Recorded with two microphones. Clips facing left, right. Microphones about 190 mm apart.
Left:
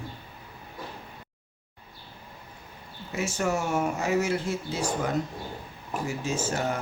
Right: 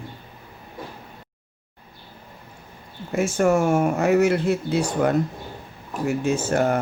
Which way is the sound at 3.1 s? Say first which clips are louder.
Right 9 dB; 50° right (ahead or behind).